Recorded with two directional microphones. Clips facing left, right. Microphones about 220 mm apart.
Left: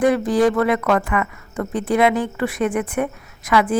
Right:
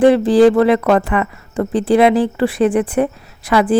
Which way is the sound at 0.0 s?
30° right (ahead or behind).